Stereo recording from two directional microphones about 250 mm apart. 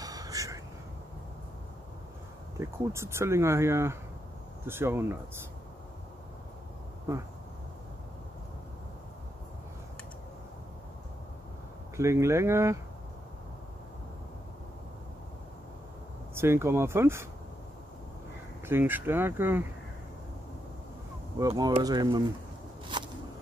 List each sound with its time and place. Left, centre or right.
0.0 s a sound: centre
2.5 s speech: centre
12.0 s speech: centre
16.3 s speech: centre
18.7 s speech: centre
21.4 s speech: centre
22.9 s a sound: centre